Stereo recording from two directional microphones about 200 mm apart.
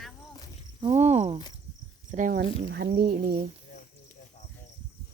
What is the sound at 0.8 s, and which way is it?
Speech, 30° right (ahead or behind).